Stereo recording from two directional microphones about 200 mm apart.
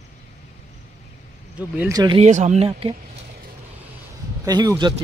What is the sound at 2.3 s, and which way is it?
Speech, 35° right (ahead or behind).